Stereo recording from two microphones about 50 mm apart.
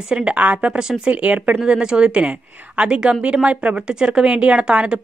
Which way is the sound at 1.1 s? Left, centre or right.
Right.